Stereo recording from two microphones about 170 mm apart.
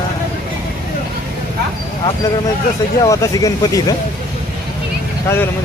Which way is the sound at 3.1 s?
20° left (ahead or behind).